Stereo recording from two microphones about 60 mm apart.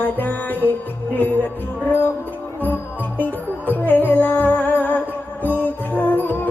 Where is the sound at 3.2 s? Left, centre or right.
Left.